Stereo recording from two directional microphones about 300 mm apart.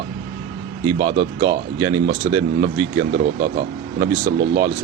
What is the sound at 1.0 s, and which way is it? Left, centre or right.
Speech, right.